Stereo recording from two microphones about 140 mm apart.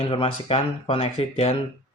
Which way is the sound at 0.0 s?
40° left (ahead or behind).